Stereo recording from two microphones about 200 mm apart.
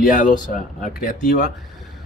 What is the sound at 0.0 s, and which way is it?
Speech, 40° left (ahead or behind).